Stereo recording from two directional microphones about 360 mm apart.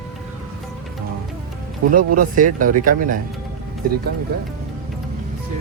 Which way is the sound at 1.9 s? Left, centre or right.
Right.